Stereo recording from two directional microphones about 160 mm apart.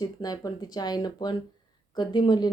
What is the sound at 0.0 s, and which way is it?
Speech, 25° left (ahead or behind).